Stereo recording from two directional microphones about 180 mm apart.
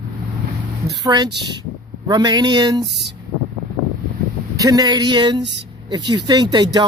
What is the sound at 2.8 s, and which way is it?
Speech, centre (ahead or behind).